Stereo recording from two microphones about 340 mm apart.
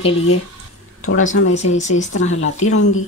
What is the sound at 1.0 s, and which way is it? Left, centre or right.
Speech, left.